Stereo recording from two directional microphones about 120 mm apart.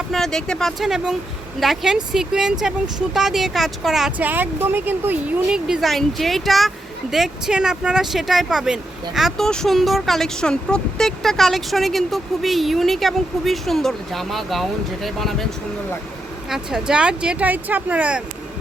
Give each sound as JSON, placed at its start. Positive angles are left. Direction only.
{"t": 0.1, "sound": "speech", "side_deg": 5}
{"t": 4.2, "sound": "speech", "side_deg": -15}
{"t": 5.5, "sound": "speech", "side_deg": -5}
{"t": 16.5, "sound": "speech", "side_deg": -5}